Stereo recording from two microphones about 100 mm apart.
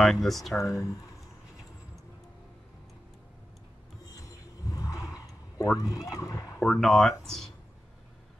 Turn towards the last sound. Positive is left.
turn(degrees=5)  # may be behind; listen again after turning